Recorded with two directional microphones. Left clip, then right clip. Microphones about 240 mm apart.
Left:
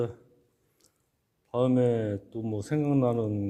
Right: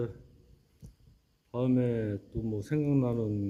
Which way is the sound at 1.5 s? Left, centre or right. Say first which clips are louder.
Left 5 dB; centre.